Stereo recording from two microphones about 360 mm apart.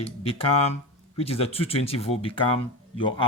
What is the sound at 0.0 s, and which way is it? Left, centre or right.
Speech, centre.